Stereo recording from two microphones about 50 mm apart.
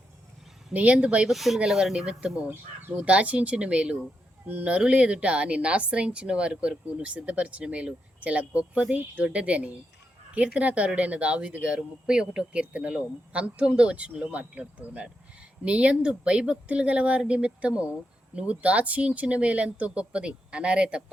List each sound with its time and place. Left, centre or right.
0.7 s a woman's voice: right
1.3 s speech: centre
3.0 s a woman's voice: right